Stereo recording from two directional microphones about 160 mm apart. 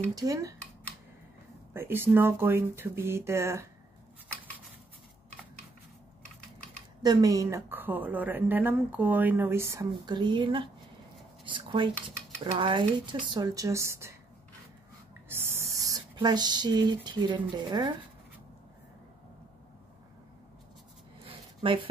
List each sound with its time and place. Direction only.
0.1 s speech: 20° right (ahead or behind)
1.7 s a woman's voice: 15° right (ahead or behind)
7.0 s a woman's voice: 25° right (ahead or behind)
9.8 s speech: 30° right (ahead or behind)
15.2 s a sound: 15° right (ahead or behind)
21.3 s a sound: 30° right (ahead or behind)